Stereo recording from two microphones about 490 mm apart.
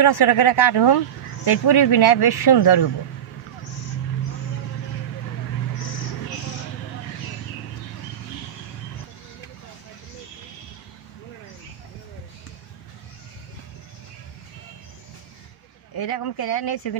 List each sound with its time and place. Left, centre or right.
0.0 s speech: left
15.9 s speech: left